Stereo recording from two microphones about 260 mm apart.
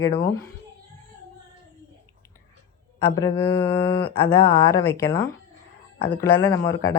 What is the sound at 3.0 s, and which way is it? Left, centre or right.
Speech, centre.